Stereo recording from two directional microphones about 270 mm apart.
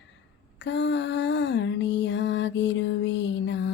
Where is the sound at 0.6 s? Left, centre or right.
Left.